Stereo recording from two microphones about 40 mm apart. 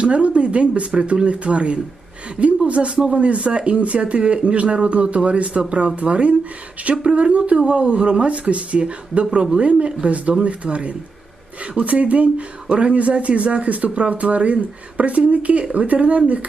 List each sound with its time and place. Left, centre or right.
0.0 s speech: right